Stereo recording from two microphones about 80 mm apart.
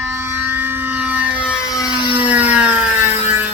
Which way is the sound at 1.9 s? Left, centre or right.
Left.